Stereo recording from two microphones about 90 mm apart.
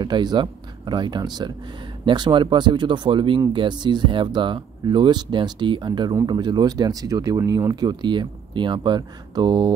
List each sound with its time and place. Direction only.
0.0 s speech: 50° right (ahead or behind)